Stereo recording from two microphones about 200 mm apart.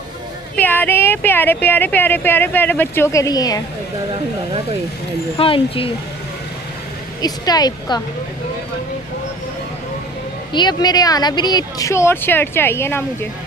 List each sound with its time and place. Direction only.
0.6 s speech: 10° left (ahead or behind)
5.4 s a woman's voice: 25° left (ahead or behind)
7.2 s a woman's voice: 20° left (ahead or behind)
10.5 s speech: 20° left (ahead or behind)